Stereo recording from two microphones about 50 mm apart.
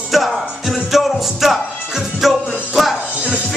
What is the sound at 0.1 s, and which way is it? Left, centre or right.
Music, centre.